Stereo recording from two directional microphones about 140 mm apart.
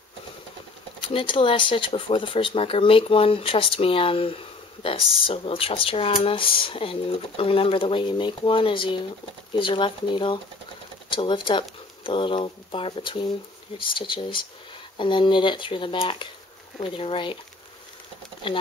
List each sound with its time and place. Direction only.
1.0 s speech: 35° left (ahead or behind)
18.4 s speech: 35° left (ahead or behind)